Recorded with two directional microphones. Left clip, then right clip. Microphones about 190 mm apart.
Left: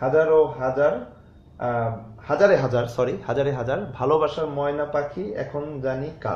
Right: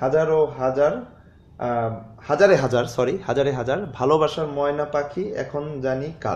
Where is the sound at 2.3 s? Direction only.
50° right (ahead or behind).